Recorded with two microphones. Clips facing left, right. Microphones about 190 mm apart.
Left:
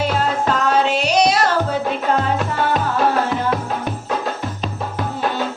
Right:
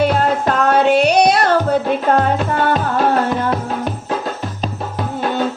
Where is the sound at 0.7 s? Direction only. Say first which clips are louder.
Right 7 dB; 55° right (ahead or behind).